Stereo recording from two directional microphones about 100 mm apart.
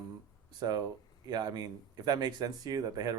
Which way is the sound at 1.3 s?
40° right (ahead or behind).